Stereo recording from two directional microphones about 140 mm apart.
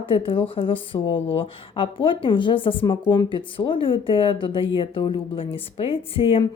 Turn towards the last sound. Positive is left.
turn(degrees=40)  # may be behind; listen again after turning